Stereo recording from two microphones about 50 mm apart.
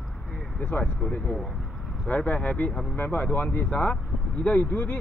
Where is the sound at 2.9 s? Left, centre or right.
Left.